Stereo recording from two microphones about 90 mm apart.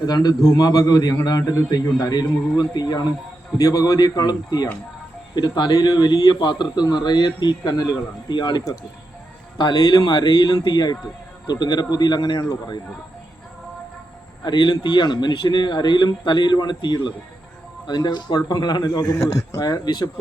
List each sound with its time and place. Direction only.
0.0 s a man's voice: 45° left (ahead or behind)
14.4 s a man's voice: 60° left (ahead or behind)